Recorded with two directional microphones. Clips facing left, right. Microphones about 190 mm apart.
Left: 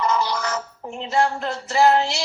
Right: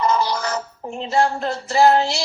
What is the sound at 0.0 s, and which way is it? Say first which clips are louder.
Music: right 2 dB; 35° right (ahead or behind).